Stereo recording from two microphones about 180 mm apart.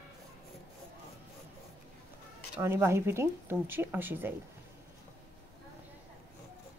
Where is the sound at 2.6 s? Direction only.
15° right (ahead or behind).